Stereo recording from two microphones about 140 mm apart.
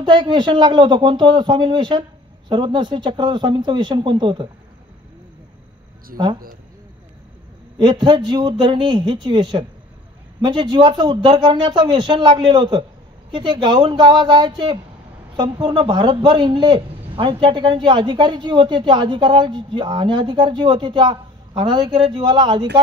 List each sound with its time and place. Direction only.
0.0 s a man's voice: 35° right (ahead or behind)
7.8 s a man's voice: 30° right (ahead or behind)